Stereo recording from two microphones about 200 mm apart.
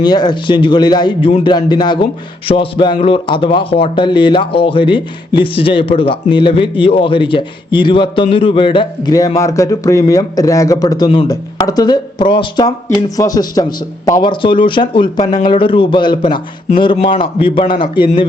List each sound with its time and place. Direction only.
0.0 s speech: 20° left (ahead or behind)